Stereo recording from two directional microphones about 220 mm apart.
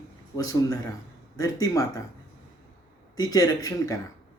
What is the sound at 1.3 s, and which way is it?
Speech, 15° left (ahead or behind).